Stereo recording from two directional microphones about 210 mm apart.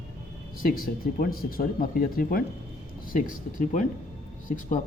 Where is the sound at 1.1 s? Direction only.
45° left (ahead or behind).